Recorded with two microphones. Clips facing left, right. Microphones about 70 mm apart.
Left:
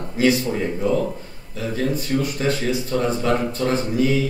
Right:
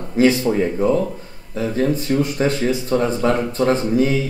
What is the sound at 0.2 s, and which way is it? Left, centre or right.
Speech, right.